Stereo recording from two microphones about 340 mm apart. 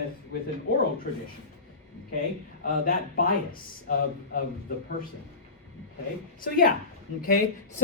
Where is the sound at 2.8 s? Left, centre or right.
Left.